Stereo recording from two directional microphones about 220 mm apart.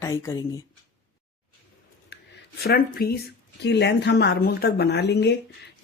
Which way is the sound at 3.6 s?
50° left (ahead or behind).